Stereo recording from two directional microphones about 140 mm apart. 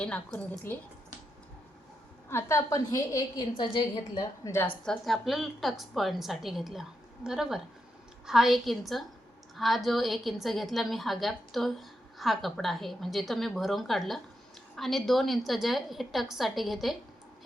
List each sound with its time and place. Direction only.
0.0 s a woman's voice: 5° left (ahead or behind)
2.3 s a woman's voice: 20° left (ahead or behind)
4.9 s a woman's voice: centre (ahead or behind)